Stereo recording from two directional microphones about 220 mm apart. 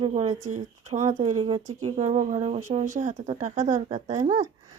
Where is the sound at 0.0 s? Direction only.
30° right (ahead or behind).